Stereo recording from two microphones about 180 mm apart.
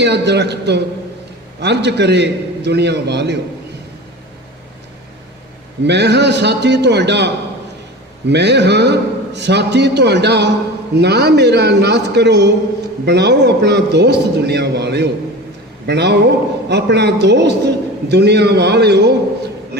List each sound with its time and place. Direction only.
0.0 s a man's voice: 70° right (ahead or behind)
5.8 s a man's voice: 70° right (ahead or behind)